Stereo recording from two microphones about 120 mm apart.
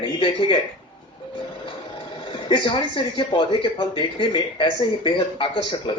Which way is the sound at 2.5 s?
40° left (ahead or behind).